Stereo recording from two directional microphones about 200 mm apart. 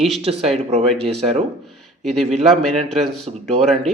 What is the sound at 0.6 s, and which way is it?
Speech, 30° right (ahead or behind).